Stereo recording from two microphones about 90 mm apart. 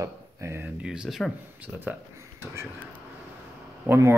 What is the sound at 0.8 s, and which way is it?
Speech, 10° right (ahead or behind).